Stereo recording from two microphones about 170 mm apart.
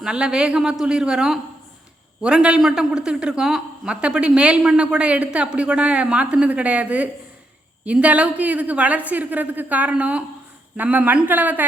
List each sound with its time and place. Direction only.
0.0 s a woman's voice: 5° right (ahead or behind)